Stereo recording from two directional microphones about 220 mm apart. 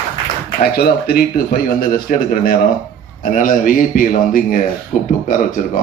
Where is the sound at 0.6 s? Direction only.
45° left (ahead or behind).